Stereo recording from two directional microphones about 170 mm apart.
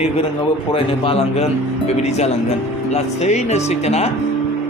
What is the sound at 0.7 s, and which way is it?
Speech, 35° left (ahead or behind).